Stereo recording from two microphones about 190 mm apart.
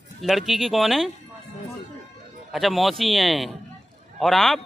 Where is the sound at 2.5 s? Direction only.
Centre (ahead or behind).